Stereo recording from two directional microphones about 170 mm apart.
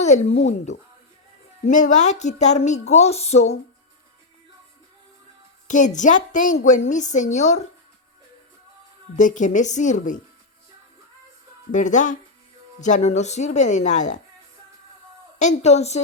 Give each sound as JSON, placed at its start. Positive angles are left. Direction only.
{"t": 0.0, "sound": "a woman's voice", "side_deg": 40}
{"t": 5.6, "sound": "a woman's voice", "side_deg": 45}
{"t": 9.1, "sound": "a woman's voice", "side_deg": 45}
{"t": 11.7, "sound": "a woman's voice", "side_deg": 45}
{"t": 15.4, "sound": "speech", "side_deg": 40}